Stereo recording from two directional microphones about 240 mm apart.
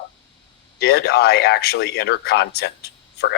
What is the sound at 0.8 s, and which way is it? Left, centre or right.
Speech, left.